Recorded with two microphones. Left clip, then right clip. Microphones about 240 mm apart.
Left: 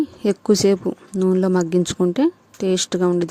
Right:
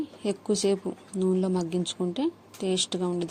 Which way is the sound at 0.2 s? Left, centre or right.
Left.